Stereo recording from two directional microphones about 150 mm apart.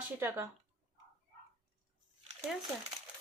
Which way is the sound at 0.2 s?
15° right (ahead or behind).